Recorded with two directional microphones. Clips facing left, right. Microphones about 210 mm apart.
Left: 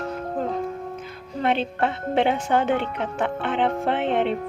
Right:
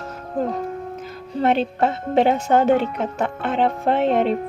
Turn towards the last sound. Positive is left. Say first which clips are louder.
# right 4 dB
turn(degrees=-40)  # may be behind; listen again after turning